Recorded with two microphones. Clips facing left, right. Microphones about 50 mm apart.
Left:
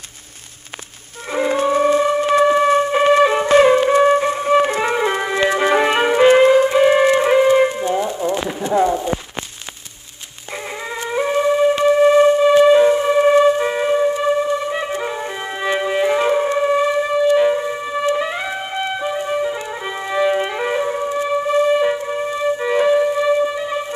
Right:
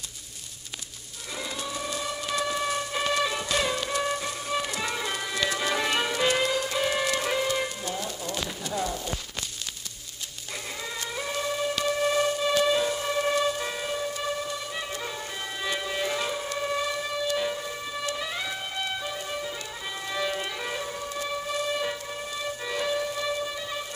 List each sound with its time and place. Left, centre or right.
1.3 s music: left
11.0 s music: left